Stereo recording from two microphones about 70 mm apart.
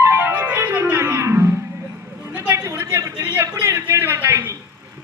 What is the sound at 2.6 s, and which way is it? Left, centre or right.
Music, right.